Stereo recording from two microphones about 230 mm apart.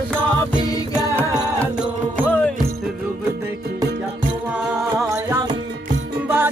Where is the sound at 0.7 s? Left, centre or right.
Centre.